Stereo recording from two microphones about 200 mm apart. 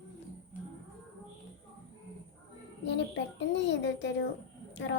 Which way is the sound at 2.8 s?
60° left (ahead or behind).